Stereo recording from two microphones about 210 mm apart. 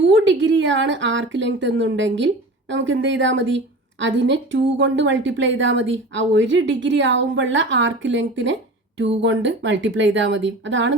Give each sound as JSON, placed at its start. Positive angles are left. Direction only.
{"t": 0.0, "sound": "a woman's voice", "side_deg": -60}